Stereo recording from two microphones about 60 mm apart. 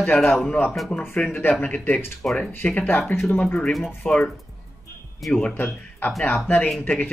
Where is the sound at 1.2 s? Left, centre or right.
Left.